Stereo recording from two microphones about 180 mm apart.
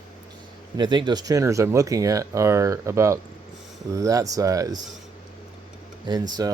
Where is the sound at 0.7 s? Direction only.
25° right (ahead or behind).